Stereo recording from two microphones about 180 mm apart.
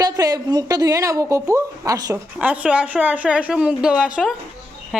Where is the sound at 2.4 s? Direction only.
5° right (ahead or behind).